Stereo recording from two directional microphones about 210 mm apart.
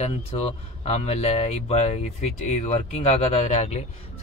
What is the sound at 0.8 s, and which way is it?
Speech, 30° left (ahead or behind).